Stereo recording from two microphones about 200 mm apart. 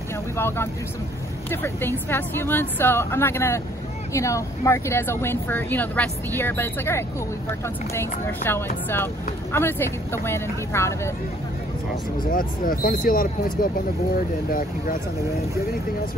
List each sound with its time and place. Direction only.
0.4 s speech: 10° left (ahead or behind)
12.3 s speech: 45° left (ahead or behind)